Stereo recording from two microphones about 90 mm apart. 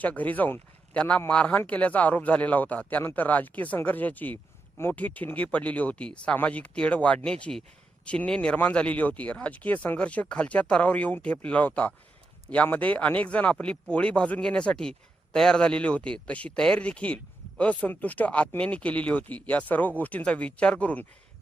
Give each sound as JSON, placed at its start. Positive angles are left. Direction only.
{"t": 0.0, "sound": "speech", "side_deg": 15}